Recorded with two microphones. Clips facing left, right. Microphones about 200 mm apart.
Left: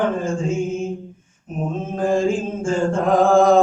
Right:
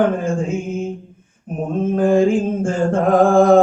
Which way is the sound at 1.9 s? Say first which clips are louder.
Right 4 dB; 60° right (ahead or behind).